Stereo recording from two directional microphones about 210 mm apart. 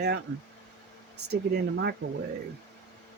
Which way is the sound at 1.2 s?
50° right (ahead or behind).